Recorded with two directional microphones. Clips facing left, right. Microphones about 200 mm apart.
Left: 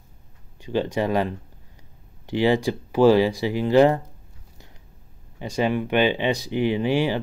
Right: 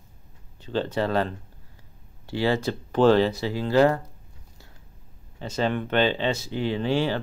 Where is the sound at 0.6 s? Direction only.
15° left (ahead or behind).